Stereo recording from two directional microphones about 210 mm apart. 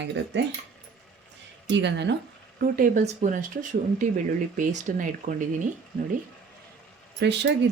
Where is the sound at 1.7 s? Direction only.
55° right (ahead or behind).